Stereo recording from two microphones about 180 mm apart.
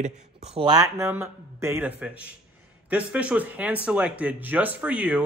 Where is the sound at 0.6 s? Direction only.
25° right (ahead or behind).